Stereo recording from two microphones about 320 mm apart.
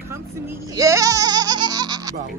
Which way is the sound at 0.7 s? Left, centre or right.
Centre.